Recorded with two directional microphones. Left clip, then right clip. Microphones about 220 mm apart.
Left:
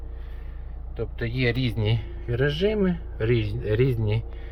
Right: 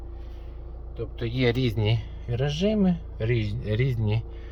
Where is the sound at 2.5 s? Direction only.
Centre (ahead or behind).